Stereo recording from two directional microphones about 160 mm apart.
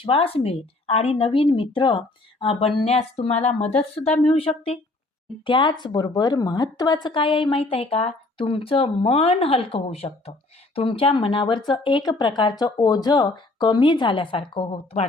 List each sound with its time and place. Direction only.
0.0 s speech: 35° left (ahead or behind)